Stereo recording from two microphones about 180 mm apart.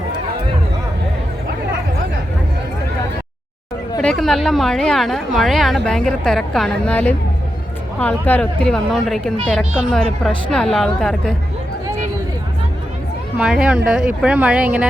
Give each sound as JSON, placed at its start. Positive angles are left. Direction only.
{"t": 4.0, "sound": "a woman's voice", "side_deg": 5}
{"t": 13.3, "sound": "a woman's voice", "side_deg": -5}